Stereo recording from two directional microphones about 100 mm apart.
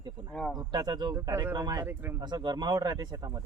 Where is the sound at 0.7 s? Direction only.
45° right (ahead or behind).